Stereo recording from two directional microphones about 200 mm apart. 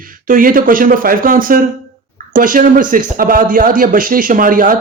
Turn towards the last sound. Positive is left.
turn(degrees=-45)  # may be behind; listen again after turning